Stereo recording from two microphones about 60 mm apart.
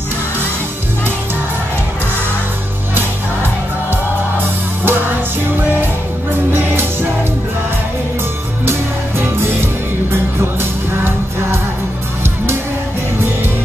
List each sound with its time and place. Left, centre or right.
3.9 s music: right
6.3 s music: right
9.4 s music: right